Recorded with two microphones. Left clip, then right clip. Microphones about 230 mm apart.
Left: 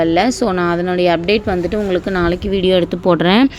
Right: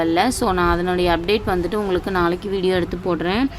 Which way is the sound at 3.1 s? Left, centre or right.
Left.